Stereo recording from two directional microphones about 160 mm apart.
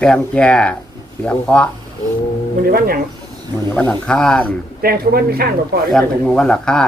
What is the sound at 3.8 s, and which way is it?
Speech, 10° left (ahead or behind).